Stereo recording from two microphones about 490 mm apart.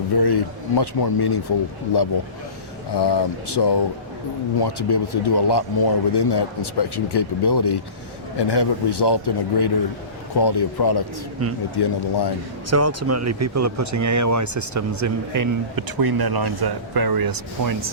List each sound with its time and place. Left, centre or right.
0.2 s a man's voice: left
12.7 s speech: right